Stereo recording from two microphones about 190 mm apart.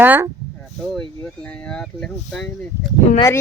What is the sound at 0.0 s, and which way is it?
Speech, 10° right (ahead or behind).